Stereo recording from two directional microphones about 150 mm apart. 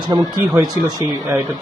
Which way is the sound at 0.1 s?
25° right (ahead or behind).